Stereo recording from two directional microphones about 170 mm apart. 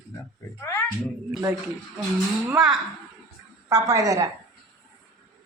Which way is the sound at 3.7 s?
15° right (ahead or behind).